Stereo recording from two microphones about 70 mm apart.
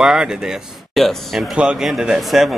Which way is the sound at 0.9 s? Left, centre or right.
Centre.